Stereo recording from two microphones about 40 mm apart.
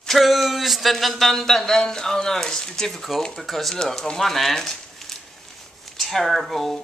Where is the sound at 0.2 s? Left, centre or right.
Centre.